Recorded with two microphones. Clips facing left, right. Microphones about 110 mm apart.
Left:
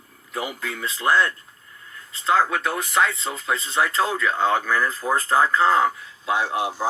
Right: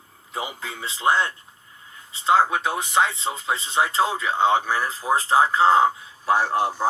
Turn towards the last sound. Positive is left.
turn(degrees=-35)  # may be behind; listen again after turning